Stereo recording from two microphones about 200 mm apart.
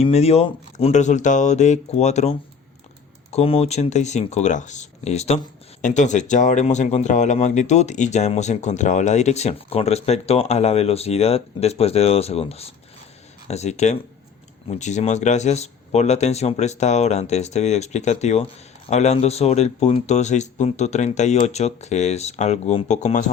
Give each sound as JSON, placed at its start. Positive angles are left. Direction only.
{"t": 0.0, "sound": "speech", "side_deg": 30}
{"t": 3.3, "sound": "speech", "side_deg": 30}